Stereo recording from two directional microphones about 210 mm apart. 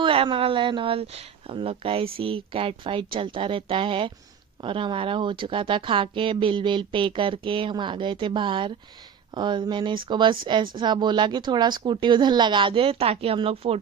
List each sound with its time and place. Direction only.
0.0 s speech: 25° right (ahead or behind)